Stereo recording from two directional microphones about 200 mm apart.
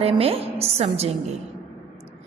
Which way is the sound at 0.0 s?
30° right (ahead or behind).